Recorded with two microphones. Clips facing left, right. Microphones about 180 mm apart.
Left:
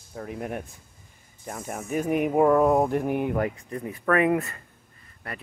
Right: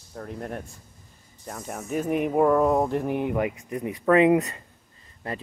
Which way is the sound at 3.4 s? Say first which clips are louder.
Right 1 dB; 15° right (ahead or behind).